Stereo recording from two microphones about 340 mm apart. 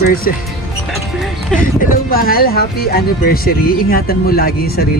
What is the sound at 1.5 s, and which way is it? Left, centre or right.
Speech, left.